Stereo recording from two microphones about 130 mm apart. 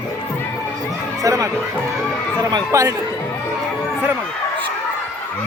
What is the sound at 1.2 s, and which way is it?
Speech, 25° right (ahead or behind).